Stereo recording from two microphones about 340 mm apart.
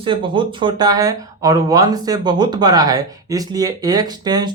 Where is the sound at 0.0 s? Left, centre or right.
Centre.